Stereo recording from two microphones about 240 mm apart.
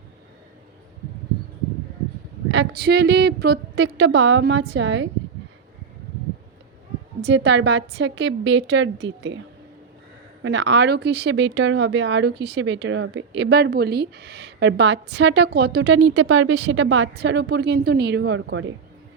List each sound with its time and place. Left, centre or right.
2.5 s speech: right
7.2 s speech: right
10.4 s speech: right